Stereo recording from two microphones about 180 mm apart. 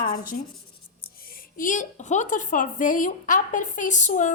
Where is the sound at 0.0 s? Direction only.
50° left (ahead or behind).